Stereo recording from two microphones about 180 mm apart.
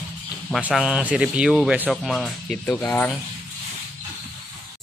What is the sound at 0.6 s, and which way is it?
Speech, 5° right (ahead or behind).